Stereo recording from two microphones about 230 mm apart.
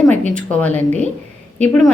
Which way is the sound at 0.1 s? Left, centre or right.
Centre.